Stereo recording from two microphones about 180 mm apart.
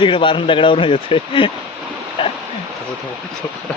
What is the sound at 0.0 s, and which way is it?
Speech, 30° left (ahead or behind).